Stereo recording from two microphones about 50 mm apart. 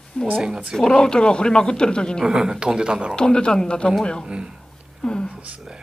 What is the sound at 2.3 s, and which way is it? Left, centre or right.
Speech, centre.